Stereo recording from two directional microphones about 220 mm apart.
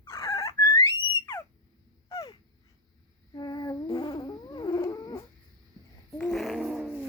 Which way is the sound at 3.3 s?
20° left (ahead or behind).